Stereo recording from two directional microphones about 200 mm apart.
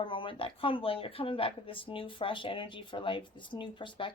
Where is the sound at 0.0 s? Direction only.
25° left (ahead or behind).